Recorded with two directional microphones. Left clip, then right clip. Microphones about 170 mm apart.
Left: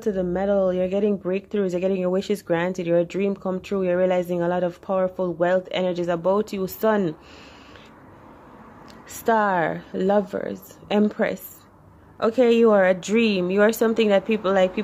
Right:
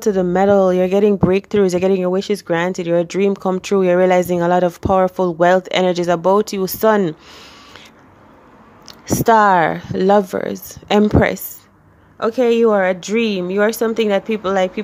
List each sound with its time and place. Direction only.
0.0 s speech: 35° right (ahead or behind)
8.8 s speech: 30° right (ahead or behind)
12.2 s speech: 15° right (ahead or behind)